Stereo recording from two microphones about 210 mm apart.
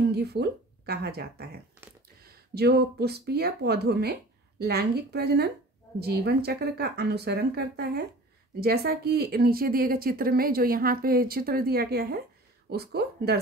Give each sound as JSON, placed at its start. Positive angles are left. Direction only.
{"t": 0.1, "sound": "speech", "side_deg": -50}